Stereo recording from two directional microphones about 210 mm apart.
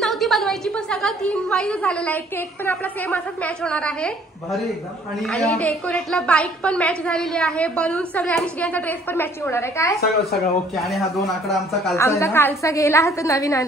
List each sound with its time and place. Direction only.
0.0 s a woman's voice: centre (ahead or behind)
10.3 s a woman's voice: centre (ahead or behind)
12.0 s a woman's voice: 15° left (ahead or behind)